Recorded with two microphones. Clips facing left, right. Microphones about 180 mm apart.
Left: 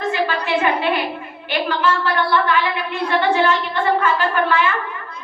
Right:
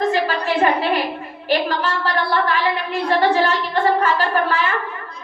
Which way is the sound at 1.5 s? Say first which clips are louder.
Even; 40° right (ahead or behind).